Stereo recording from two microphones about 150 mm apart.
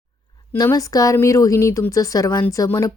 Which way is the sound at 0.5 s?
20° left (ahead or behind).